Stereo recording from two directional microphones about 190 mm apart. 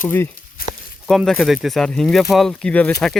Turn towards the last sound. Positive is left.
turn(degrees=5)  # may be behind; listen again after turning